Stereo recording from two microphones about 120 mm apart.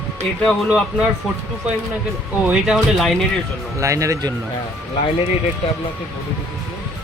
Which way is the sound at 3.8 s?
25° right (ahead or behind).